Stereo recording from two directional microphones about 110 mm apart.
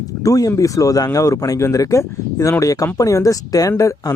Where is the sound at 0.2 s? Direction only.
30° left (ahead or behind).